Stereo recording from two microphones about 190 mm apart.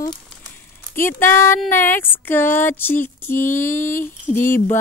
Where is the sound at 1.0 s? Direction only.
10° left (ahead or behind).